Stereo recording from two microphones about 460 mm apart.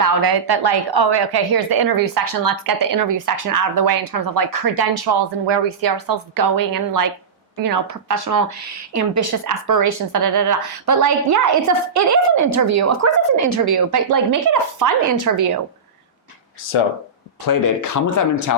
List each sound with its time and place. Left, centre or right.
0.0 s a woman's voice: right
17.4 s speech: left